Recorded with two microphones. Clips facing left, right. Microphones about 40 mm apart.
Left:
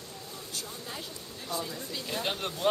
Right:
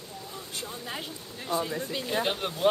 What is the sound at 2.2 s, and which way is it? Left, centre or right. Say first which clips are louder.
Speech: right 3 dB; centre.